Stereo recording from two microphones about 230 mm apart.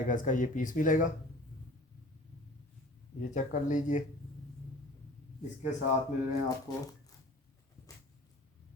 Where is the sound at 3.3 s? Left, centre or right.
Left.